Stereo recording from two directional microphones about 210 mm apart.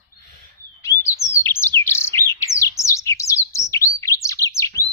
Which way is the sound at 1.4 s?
10° left (ahead or behind).